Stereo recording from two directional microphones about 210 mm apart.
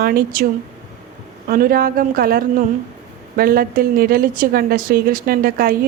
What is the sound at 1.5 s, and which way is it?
A woman's voice, 45° right (ahead or behind).